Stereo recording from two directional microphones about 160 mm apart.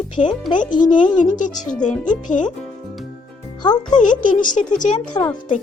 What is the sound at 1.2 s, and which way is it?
Speech, 55° left (ahead or behind).